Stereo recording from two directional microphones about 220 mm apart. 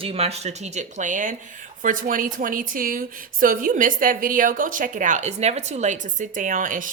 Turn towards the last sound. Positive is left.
turn(degrees=-40)  # may be behind; listen again after turning